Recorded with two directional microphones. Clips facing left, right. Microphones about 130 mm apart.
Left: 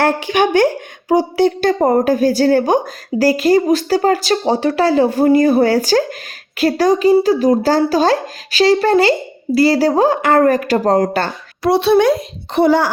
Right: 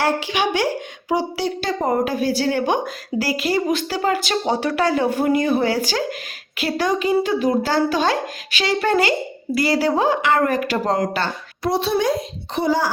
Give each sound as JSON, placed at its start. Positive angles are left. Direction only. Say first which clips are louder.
{"t": 0.0, "sound": "a woman's voice", "louder": "left 6 dB", "side_deg": 50}
{"t": 11.6, "sound": "a woman's voice", "louder": "left 8 dB", "side_deg": 70}